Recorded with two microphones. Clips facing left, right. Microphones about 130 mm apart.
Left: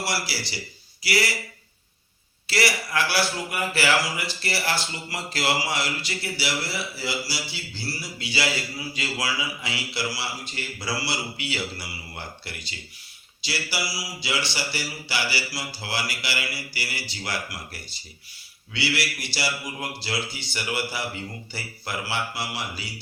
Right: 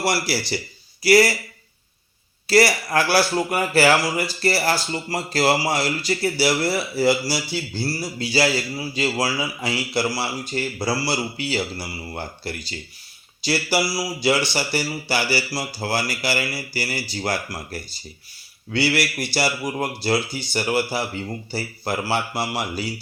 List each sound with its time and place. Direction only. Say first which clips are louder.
0.0 s speech: right 7 dB; 50° right (ahead or behind)
2.5 s a man's voice: right 8 dB; 40° right (ahead or behind)
13.4 s a man's voice: right 9 dB; 50° right (ahead or behind)